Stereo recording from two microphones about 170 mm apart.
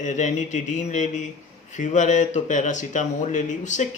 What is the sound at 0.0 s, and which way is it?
Speech, 45° left (ahead or behind).